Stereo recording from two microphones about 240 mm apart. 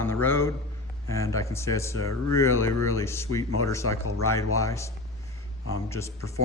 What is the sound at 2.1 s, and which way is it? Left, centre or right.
Speech, left.